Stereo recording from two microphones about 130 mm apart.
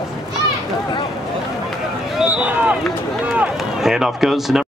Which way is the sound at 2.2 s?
10° right (ahead or behind).